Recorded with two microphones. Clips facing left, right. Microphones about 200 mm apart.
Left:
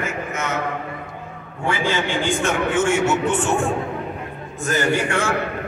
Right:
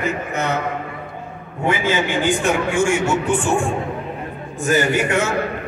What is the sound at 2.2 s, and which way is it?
Speech, 15° right (ahead or behind).